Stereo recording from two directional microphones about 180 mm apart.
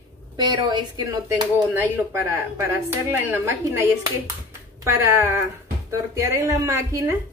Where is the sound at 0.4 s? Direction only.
25° right (ahead or behind).